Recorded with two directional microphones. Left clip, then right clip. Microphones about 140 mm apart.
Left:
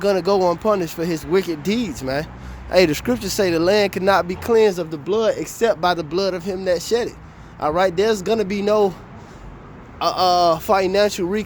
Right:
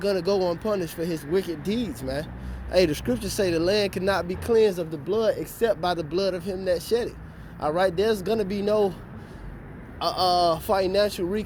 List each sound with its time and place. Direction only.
0.0 s speech: 55° left (ahead or behind)
10.0 s speech: 55° left (ahead or behind)